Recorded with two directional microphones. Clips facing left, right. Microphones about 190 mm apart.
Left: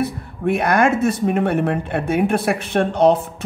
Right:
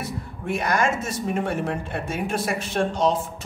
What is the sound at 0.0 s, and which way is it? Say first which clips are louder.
A man's voice: left 10 dB; 60° left (ahead or behind).